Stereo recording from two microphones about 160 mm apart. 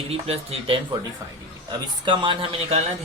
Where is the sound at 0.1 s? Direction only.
40° right (ahead or behind).